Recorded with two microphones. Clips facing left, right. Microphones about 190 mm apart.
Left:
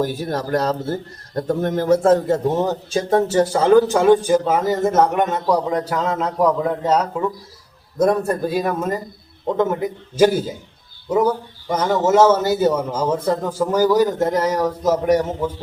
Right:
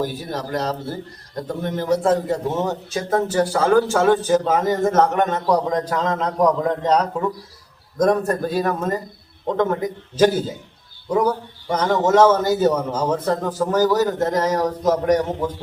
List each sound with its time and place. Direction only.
0.0 s a man's voice: 45° left (ahead or behind); by 15.5 s 10° left (ahead or behind)